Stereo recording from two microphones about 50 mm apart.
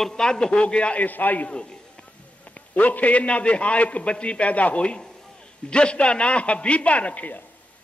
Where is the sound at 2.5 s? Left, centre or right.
Left.